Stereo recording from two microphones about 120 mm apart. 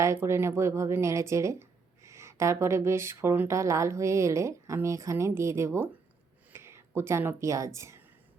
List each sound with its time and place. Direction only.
0.0 s speech: 20° right (ahead or behind)